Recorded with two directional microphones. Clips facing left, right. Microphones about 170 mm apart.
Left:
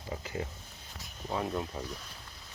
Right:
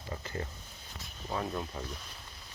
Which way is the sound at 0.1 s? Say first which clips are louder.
Left 2 dB; 10° left (ahead or behind).